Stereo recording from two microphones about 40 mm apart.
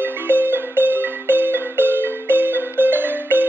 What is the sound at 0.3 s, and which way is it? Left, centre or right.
Marimba, right.